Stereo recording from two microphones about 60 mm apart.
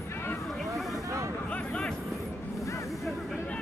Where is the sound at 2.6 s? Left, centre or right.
Left.